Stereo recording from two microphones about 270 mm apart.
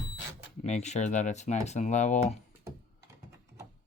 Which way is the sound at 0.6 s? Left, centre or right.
Left.